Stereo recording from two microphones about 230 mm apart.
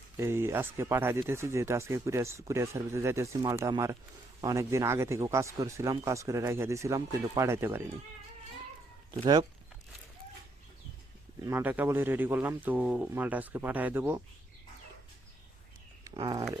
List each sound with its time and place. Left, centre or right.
0.2 s speech: centre
9.2 s speech: right
11.4 s speech: centre
16.0 s speech: centre